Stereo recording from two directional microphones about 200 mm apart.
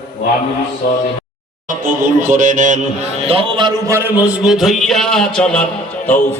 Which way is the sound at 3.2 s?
30° right (ahead or behind).